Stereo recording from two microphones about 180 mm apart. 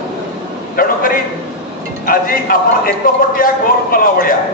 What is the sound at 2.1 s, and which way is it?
Speech, 55° left (ahead or behind).